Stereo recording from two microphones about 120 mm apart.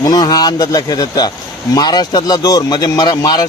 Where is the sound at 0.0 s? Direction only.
35° left (ahead or behind).